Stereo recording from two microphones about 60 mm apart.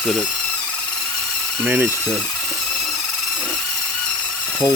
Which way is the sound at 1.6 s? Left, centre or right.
Right.